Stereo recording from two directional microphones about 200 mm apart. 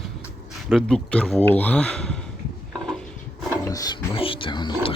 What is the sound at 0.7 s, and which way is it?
Speech, 5° left (ahead or behind).